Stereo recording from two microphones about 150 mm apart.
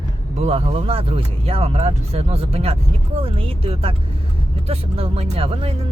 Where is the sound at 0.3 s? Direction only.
40° right (ahead or behind).